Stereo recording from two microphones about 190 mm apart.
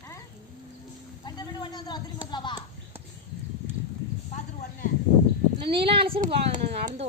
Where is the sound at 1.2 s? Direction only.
20° left (ahead or behind).